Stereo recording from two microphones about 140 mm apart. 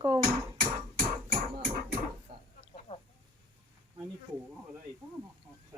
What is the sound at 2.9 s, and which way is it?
Chicken, 45° left (ahead or behind).